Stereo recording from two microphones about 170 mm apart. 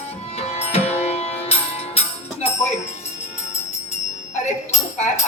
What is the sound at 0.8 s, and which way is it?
Music, 40° left (ahead or behind).